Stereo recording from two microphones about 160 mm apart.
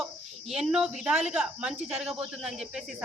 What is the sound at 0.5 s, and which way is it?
Speech, 5° right (ahead or behind).